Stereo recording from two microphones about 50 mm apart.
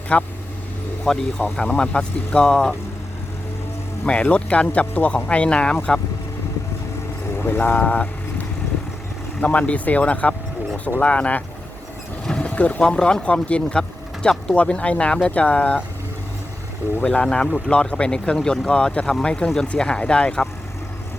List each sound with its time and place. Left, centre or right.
0.1 s speech: left
1.1 s speech: centre
4.0 s speech: left
7.3 s vehicle: left
7.8 s vehicle: left
9.4 s speech: left
12.4 s boat: left
12.8 s speech: centre
17.0 s speech: left